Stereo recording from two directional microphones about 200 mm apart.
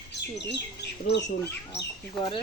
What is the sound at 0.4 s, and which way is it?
Speech, 55° left (ahead or behind).